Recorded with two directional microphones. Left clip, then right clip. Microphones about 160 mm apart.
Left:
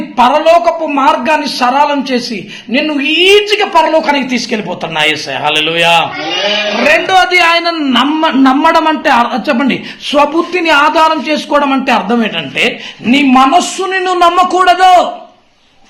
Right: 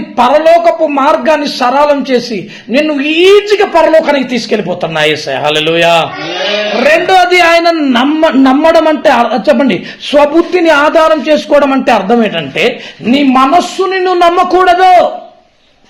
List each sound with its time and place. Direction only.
0.2 s a man's voice: 40° right (ahead or behind); by 15.0 s 20° right (ahead or behind)